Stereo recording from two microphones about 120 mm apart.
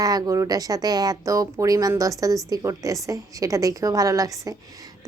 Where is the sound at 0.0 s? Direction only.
30° right (ahead or behind).